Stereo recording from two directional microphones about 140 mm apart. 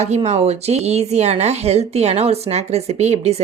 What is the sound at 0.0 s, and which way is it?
Speech, 55° right (ahead or behind).